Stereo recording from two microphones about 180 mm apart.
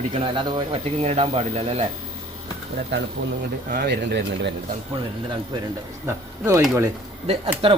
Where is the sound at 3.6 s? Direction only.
55° right (ahead or behind).